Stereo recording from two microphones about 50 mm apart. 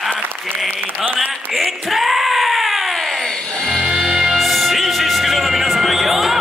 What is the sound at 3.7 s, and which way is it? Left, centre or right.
Music, centre.